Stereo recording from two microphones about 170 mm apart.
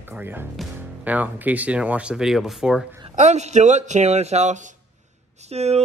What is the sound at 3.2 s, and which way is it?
Speech, 40° right (ahead or behind).